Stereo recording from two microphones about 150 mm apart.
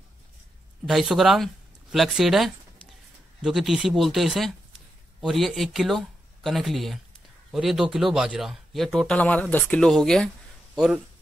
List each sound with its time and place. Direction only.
0.8 s speech: centre (ahead or behind)